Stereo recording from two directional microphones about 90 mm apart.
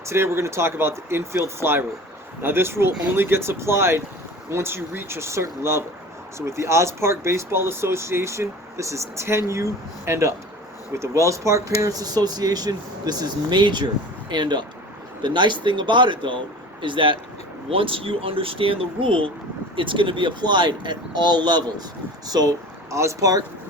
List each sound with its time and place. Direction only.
0.0 s speech: 30° right (ahead or behind); by 17.2 s 65° right (ahead or behind)
17.7 s speech: 85° right
19.7 s speech: 70° right (ahead or behind); by 23.4 s 35° right (ahead or behind)